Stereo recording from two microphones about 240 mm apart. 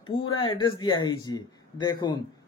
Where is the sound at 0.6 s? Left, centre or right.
Centre.